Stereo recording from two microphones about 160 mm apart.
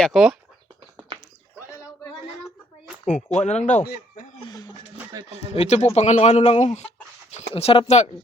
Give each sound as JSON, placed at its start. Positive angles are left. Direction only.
{"t": 0.0, "sound": "speech", "side_deg": -5}
{"t": 3.4, "sound": "speech", "side_deg": 45}
{"t": 4.4, "sound": "a sound", "side_deg": 25}
{"t": 5.1, "sound": "speech", "side_deg": -25}
{"t": 5.5, "sound": "speech", "side_deg": 45}